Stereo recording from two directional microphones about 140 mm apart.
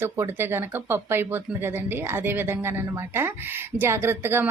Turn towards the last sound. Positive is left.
turn(degrees=-15)  # may be behind; listen again after turning